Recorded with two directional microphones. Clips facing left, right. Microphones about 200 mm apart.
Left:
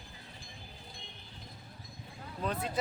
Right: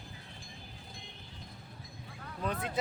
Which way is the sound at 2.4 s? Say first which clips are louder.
Left 1 dB; 20° left (ahead or behind).